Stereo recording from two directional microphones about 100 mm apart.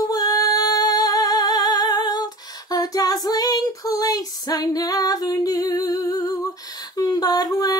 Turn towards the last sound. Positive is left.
turn(degrees=40)  # may be behind; listen again after turning